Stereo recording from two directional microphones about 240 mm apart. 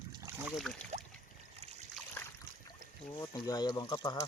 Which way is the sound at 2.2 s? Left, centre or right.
Centre.